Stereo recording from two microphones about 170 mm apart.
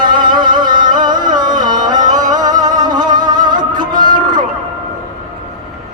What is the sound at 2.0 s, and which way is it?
Music, 50° right (ahead or behind).